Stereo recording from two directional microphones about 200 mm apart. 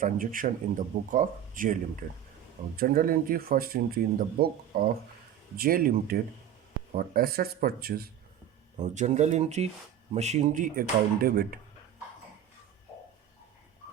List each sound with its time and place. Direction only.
0.0 s speech: 45° right (ahead or behind)
8.8 s speech: 35° right (ahead or behind)